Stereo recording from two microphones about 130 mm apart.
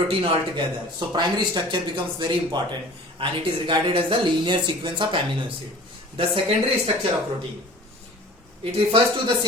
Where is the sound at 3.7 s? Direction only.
40° right (ahead or behind).